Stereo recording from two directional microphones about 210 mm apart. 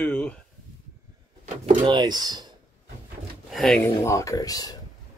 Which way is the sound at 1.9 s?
20° right (ahead or behind).